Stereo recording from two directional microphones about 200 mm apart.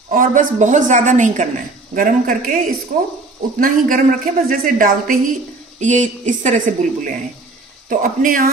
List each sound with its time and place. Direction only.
0.1 s speech: 45° right (ahead or behind)